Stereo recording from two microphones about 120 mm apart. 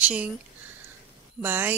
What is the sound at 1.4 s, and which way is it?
Speech, 15° right (ahead or behind).